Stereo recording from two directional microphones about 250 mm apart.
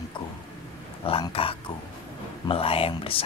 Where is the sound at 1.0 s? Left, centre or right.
Left.